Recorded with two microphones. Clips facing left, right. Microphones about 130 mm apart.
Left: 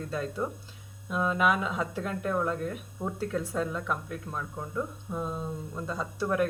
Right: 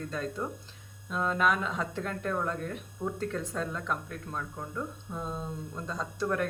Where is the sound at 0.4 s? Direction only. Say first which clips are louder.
Left 3 dB; 10° left (ahead or behind).